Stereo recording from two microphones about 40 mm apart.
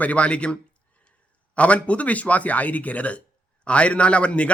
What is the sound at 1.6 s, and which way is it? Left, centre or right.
Speech, left.